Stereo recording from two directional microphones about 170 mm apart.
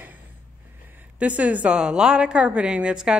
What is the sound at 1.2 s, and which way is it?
A woman's voice, 10° right (ahead or behind).